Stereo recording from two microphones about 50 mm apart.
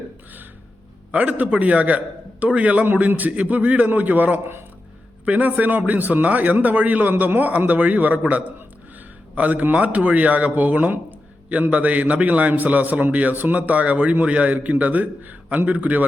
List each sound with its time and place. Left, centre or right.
1.1 s a man's voice: right
2.8 s a man's voice: right